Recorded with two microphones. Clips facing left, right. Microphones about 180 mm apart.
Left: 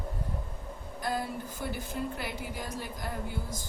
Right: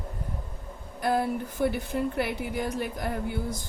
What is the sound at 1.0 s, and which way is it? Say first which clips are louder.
Speech: right 7 dB; 65° right (ahead or behind).